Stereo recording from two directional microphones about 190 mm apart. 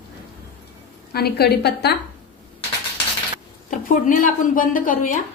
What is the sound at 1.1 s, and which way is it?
Speech, 55° left (ahead or behind).